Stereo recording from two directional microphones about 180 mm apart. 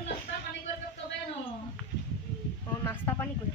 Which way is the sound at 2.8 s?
15° left (ahead or behind).